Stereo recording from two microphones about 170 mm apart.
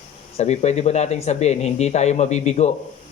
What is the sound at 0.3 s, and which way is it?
Speech, 40° left (ahead or behind).